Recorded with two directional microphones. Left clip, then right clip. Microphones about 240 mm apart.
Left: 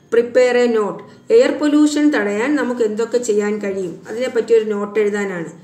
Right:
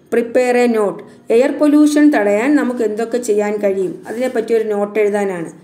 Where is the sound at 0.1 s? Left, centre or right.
Right.